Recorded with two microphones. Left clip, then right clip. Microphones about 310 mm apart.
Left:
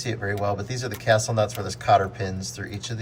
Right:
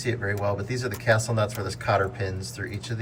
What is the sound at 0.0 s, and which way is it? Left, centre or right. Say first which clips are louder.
Speech: left 1 dB; centre.